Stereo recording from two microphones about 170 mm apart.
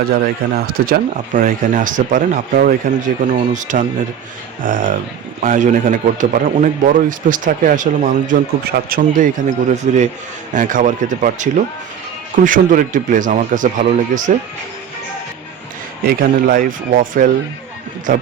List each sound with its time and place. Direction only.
0.1 s a man's voice: 60° right (ahead or behind)
16.0 s a man's voice: 55° right (ahead or behind)